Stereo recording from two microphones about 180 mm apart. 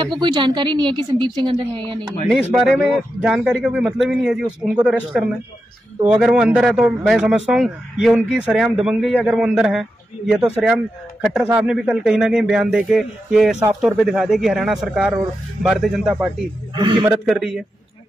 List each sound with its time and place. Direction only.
0.0 s a woman's voice: 25° right (ahead or behind)
2.5 s a man's voice: centre (ahead or behind)
6.2 s a man's voice: 5° right (ahead or behind)
16.7 s a woman's voice: 25° right (ahead or behind)
17.3 s a man's voice: centre (ahead or behind)